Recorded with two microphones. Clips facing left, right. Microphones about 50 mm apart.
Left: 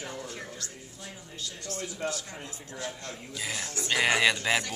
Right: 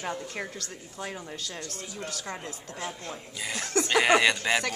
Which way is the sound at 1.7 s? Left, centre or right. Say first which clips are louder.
Left 4 dB; left.